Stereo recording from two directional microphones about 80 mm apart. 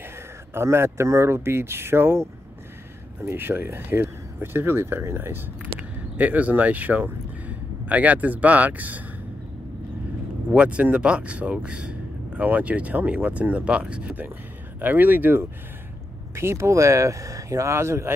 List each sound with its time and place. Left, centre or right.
0.6 s speech: right
10.5 s speech: centre; by 18.1 s right